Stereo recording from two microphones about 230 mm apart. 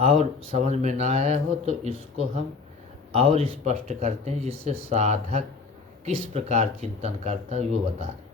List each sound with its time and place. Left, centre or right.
0.0 s speech: right